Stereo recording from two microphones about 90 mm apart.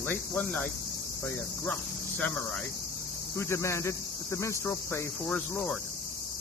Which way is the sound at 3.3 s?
30° left (ahead or behind).